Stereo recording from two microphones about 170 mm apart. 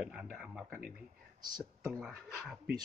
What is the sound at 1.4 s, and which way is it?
Speech, 25° right (ahead or behind).